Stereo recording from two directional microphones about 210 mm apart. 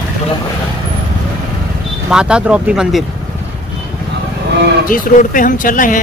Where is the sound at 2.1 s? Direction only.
5° right (ahead or behind).